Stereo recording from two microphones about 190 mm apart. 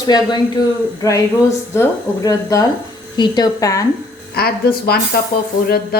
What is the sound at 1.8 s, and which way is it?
Speech, 20° left (ahead or behind).